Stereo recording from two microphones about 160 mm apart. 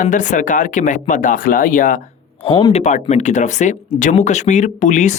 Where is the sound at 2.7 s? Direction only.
45° left (ahead or behind).